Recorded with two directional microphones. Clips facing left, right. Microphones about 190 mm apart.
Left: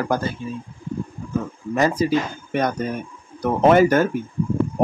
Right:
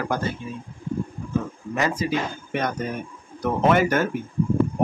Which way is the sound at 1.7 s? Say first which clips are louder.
Left 5 dB; 35° left (ahead or behind).